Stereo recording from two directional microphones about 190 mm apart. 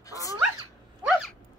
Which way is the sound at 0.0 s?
15° left (ahead or behind).